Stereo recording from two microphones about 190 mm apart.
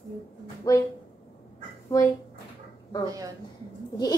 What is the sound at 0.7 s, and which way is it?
Speech, 20° left (ahead or behind).